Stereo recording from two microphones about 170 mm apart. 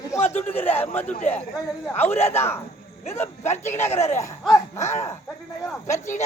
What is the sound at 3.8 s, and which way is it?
Speech, 15° left (ahead or behind).